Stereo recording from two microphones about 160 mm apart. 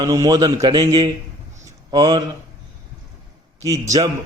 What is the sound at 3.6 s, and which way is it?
Speech, 20° right (ahead or behind).